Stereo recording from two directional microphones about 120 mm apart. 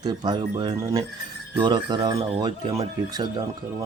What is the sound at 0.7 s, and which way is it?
Speech, 25° right (ahead or behind).